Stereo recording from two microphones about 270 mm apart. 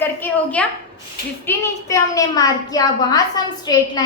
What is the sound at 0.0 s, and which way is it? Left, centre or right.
A child's voice, centre.